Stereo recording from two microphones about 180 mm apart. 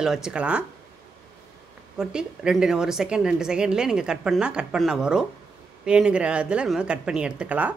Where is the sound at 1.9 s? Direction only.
5° right (ahead or behind).